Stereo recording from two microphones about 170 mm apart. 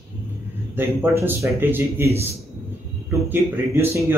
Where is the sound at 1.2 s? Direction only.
10° right (ahead or behind).